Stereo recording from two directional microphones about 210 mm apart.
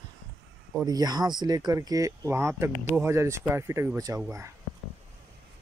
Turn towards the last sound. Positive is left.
turn(degrees=-15)  # may be behind; listen again after turning